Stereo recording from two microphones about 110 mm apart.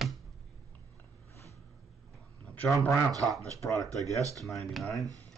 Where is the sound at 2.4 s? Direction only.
15° left (ahead or behind).